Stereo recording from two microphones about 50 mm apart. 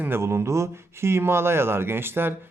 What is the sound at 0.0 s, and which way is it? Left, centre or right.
Speech, right.